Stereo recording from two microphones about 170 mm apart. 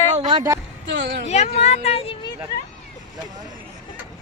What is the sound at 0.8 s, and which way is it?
Speech, 90° right.